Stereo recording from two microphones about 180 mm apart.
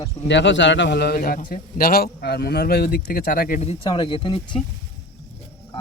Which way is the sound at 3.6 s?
30° left (ahead or behind).